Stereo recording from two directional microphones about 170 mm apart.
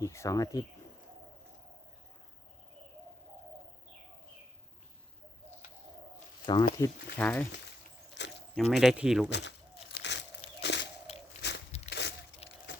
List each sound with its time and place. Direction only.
0.0 s speech: 15° left (ahead or behind)
6.4 s speech: 25° left (ahead or behind)
6.7 s speech: 15° left (ahead or behind)
8.2 s a sound: 90° left
8.5 s speech: centre (ahead or behind)
9.9 s biting: 90° left
10.6 s a sound: 90° left
11.4 s biting: 90° left
11.9 s a sound: 90° left